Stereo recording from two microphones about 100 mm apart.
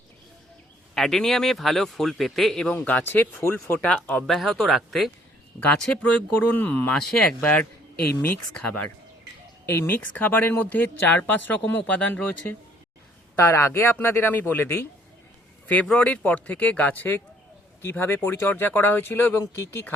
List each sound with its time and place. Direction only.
0.9 s speech: 5° left (ahead or behind)
2.7 s speech: 20° left (ahead or behind)
4.3 s speech: centre (ahead or behind)
9.6 s speech: 25° left (ahead or behind)